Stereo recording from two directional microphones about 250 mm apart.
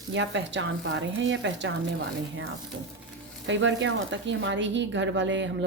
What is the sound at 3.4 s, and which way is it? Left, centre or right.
Speech, right.